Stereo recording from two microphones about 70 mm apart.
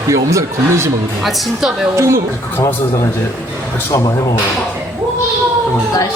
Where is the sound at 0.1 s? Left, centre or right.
Right.